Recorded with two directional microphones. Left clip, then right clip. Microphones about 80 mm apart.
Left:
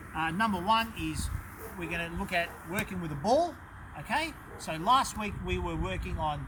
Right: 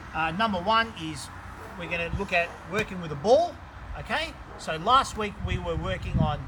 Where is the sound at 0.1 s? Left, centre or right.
Right.